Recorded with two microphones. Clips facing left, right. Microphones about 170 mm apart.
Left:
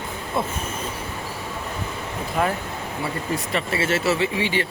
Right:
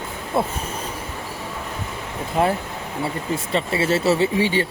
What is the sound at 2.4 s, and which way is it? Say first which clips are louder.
Speech: right 4 dB; 30° right (ahead or behind).